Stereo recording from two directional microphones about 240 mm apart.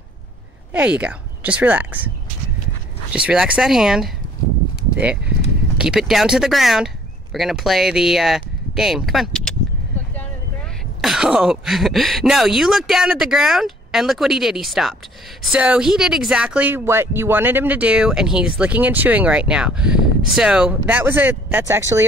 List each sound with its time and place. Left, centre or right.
0.7 s speech: centre
3.3 s speech: centre
11.0 s speech: centre